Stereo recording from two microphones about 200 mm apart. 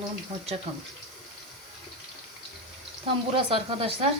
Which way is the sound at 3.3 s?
30° right (ahead or behind).